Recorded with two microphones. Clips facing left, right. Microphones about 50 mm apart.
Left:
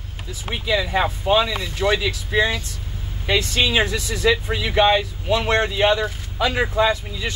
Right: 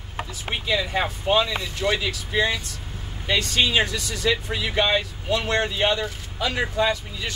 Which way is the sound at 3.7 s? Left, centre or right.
Left.